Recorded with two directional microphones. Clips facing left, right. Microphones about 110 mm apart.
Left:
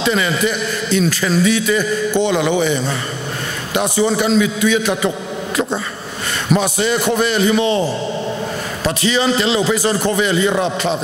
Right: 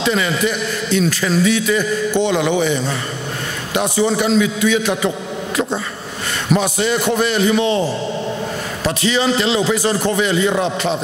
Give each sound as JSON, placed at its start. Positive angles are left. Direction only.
{"t": 0.0, "sound": "a man's voice", "side_deg": 20}
{"t": 6.5, "sound": "a man's voice", "side_deg": 20}